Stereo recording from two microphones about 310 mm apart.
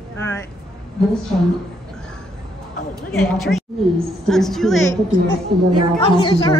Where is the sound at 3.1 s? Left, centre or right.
Centre.